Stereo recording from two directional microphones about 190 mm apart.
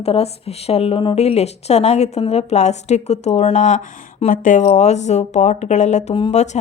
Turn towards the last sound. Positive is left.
turn(degrees=30)  # may be behind; listen again after turning